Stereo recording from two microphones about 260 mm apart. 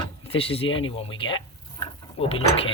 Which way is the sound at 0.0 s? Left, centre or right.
Left.